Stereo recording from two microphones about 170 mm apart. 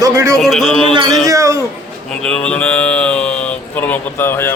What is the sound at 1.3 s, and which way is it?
Speech, 15° right (ahead or behind).